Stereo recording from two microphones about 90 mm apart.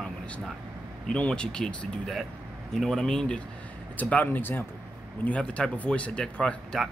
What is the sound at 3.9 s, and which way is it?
Speech, 20° left (ahead or behind).